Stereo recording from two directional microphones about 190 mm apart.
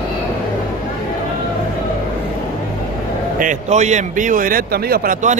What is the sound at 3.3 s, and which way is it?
A man's voice, 40° right (ahead or behind).